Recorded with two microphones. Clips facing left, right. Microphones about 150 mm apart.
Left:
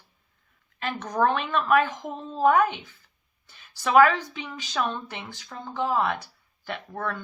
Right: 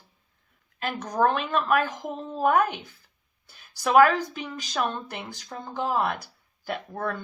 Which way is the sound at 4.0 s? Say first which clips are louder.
Even; 40° right (ahead or behind).